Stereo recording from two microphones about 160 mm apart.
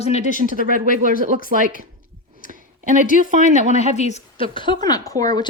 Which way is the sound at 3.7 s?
45° left (ahead or behind).